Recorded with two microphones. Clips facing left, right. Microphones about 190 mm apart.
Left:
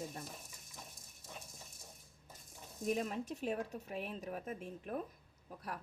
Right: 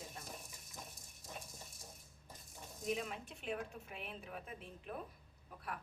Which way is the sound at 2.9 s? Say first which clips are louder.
Left 4 dB; 40° left (ahead or behind).